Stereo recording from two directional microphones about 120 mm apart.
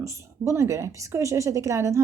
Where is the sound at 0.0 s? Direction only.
25° right (ahead or behind).